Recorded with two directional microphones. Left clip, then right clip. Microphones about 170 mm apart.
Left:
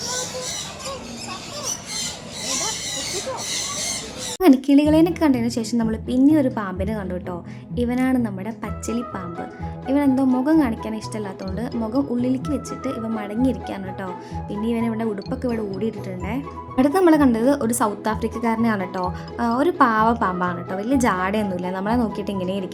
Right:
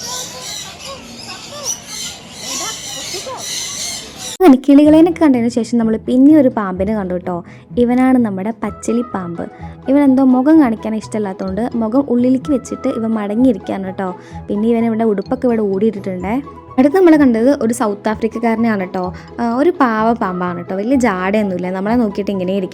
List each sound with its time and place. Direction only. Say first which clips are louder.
4.4 s speech: right 7 dB; 30° right (ahead or behind)